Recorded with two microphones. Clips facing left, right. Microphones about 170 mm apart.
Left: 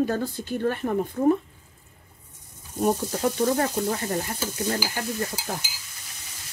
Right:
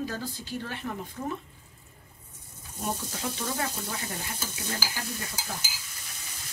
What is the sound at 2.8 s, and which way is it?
Speech, 45° left (ahead or behind).